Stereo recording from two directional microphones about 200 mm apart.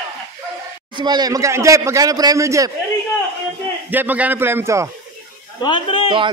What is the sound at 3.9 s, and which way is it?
A man's voice, 10° right (ahead or behind).